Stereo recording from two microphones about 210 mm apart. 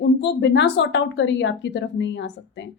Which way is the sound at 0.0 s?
55° left (ahead or behind).